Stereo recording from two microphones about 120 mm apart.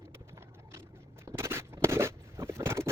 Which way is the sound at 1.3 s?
20° right (ahead or behind).